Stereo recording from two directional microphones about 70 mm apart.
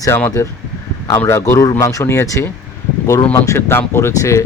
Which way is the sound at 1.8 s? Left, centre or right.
Left.